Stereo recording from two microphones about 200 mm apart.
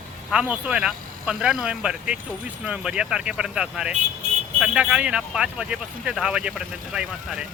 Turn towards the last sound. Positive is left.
turn(degrees=-5)  # may be behind; listen again after turning